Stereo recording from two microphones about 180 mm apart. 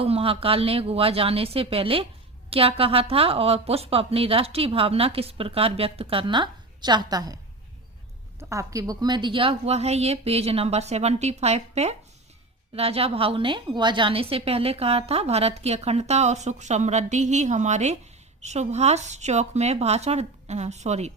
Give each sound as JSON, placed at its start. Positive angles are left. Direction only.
{"t": 0.0, "sound": "a woman's voice", "side_deg": -30}
{"t": 8.4, "sound": "a woman's voice", "side_deg": -15}